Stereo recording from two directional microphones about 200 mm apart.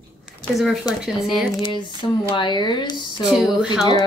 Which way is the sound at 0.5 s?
Centre (ahead or behind).